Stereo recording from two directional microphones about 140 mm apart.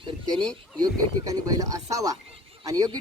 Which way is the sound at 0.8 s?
25° right (ahead or behind).